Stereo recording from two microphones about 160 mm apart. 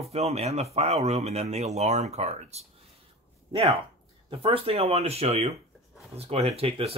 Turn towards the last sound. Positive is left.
turn(degrees=-40)  # may be behind; listen again after turning